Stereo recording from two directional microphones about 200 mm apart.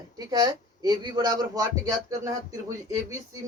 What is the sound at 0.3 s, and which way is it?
Speech, 20° right (ahead or behind).